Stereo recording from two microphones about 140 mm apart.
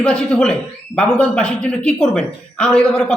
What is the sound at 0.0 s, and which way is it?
Speech, 10° left (ahead or behind).